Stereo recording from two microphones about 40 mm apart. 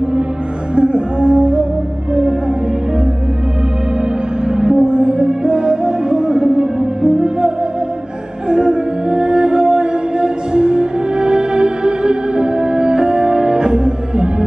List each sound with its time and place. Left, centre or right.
0.7 s music: right
4.5 s music: centre